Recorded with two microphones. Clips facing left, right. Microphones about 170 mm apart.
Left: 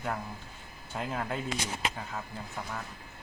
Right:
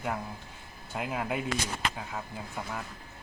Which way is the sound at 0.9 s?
10° right (ahead or behind).